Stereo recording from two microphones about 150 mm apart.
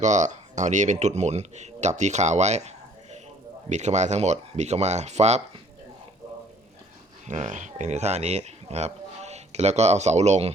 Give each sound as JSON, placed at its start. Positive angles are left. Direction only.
{"t": 0.0, "sound": "speech", "side_deg": -55}
{"t": 7.3, "sound": "speech", "side_deg": -50}